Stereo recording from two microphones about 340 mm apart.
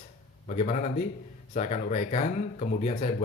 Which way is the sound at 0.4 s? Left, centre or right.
Left.